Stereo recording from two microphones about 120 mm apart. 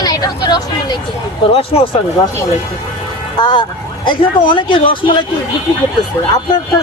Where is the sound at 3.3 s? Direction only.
40° left (ahead or behind).